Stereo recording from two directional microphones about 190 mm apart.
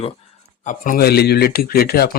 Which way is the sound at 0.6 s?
45° left (ahead or behind).